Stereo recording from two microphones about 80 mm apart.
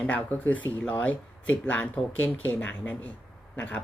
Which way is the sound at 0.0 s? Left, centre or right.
Centre.